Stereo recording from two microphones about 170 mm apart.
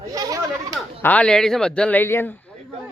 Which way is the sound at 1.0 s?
10° left (ahead or behind).